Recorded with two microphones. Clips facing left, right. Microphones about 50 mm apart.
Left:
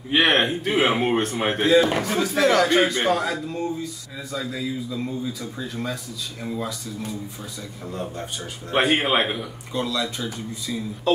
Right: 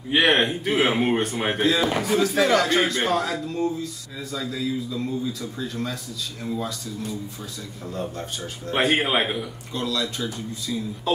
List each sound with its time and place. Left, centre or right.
0.1 s a man's voice: centre
7.9 s speech: centre
9.8 s a man's voice: centre
10.0 s a man's voice: centre